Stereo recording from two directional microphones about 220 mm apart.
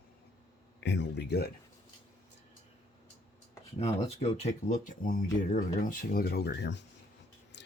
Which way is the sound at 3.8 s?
25° left (ahead or behind).